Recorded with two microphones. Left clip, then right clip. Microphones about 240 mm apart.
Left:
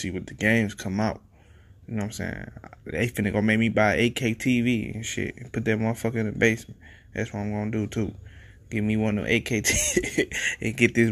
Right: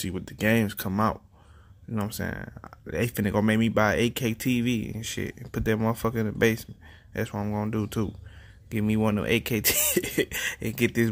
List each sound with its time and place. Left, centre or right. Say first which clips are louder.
0.0 s speech: left 2 dB; centre
2.0 s speech: even; centre